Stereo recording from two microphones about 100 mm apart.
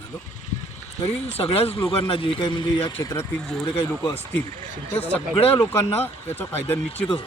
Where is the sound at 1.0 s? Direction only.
90° left; by 3.3 s 35° left (ahead or behind).